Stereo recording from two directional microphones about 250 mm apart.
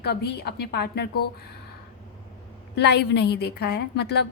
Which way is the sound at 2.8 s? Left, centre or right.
Left.